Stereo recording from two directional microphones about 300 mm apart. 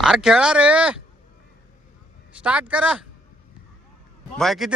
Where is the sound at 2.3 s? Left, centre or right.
Centre.